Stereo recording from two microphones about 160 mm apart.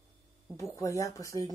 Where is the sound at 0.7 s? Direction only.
20° left (ahead or behind).